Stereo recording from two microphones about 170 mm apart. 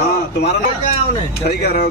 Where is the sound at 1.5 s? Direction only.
70° left (ahead or behind).